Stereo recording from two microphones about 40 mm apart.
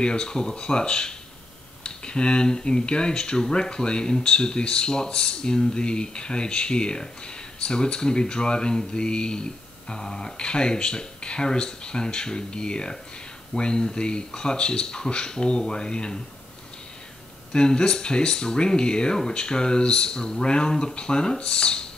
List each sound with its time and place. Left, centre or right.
0.0 s speech: left
17.5 s speech: left